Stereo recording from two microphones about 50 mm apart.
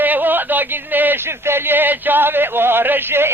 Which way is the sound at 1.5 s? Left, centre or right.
Right.